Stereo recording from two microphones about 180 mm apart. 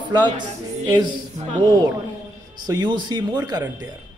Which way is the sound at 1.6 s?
25° right (ahead or behind).